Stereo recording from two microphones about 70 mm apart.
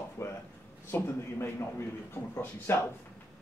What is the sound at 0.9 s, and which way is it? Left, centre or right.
Speech, left.